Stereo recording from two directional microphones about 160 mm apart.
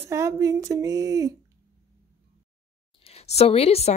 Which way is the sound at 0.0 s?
15° right (ahead or behind).